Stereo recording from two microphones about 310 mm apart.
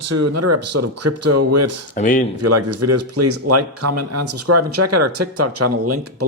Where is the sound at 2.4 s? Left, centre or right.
Right.